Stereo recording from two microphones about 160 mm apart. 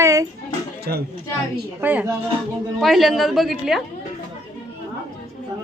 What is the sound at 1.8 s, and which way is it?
Speech, 10° right (ahead or behind).